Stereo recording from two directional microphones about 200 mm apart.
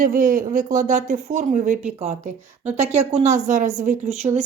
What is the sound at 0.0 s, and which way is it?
Speech, 45° right (ahead or behind).